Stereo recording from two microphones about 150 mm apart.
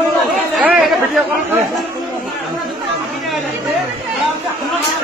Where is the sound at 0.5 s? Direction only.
Centre (ahead or behind).